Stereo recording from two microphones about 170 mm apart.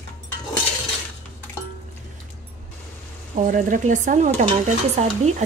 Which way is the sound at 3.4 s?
50° right (ahead or behind).